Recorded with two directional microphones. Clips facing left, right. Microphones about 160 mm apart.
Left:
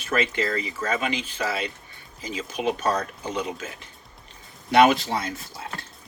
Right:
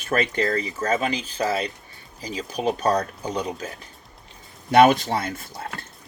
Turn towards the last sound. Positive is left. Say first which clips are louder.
# right 2 dB
turn(degrees=-55)  # may be behind; listen again after turning